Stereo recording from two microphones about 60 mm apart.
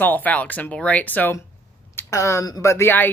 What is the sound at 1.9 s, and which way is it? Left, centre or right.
Speech, left.